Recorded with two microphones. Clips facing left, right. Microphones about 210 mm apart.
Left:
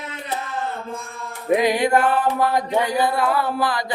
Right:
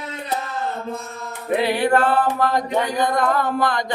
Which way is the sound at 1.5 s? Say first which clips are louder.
Even; 15° left (ahead or behind).